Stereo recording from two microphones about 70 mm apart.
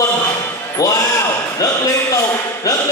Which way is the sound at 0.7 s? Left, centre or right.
Left.